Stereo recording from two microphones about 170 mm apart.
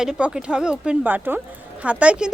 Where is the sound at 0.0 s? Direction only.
5° right (ahead or behind).